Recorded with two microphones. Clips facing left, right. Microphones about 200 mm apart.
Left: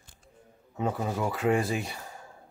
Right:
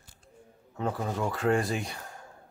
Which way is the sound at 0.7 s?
5° left (ahead or behind).